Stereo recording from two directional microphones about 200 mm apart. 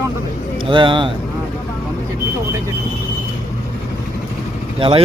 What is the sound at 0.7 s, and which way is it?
Speech, 25° right (ahead or behind).